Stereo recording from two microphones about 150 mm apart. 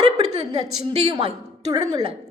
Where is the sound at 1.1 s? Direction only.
30° right (ahead or behind).